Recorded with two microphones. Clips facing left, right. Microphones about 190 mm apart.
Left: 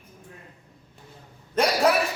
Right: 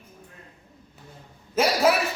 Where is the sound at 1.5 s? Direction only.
5° right (ahead or behind).